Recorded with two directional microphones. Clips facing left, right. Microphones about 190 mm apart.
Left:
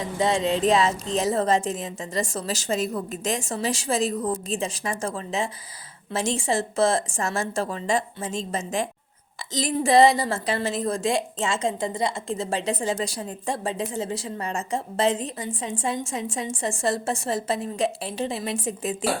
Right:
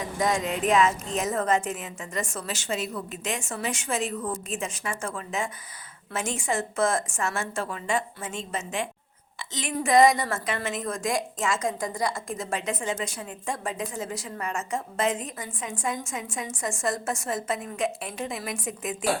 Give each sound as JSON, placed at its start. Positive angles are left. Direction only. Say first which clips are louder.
{"t": 0.0, "sound": "a woman's voice", "louder": "left 3 dB", "side_deg": 30}